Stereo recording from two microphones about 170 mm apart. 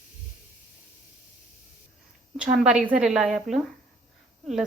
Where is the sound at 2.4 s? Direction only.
5° right (ahead or behind).